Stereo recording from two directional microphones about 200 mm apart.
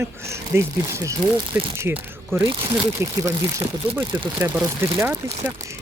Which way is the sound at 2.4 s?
25° right (ahead or behind).